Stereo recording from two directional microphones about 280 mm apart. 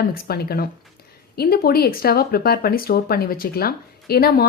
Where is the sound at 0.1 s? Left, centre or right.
Left.